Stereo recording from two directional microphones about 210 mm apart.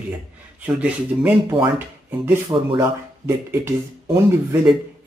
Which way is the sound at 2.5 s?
20° right (ahead or behind).